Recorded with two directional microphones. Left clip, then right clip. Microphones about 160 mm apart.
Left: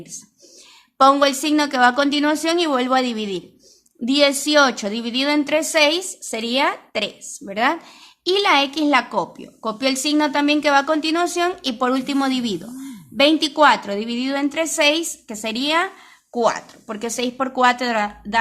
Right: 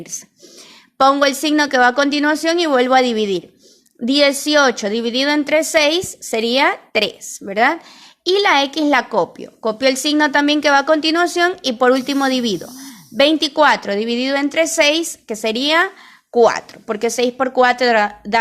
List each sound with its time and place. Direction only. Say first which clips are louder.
1.2 s a woman's voice: right 2 dB; 20° right (ahead or behind)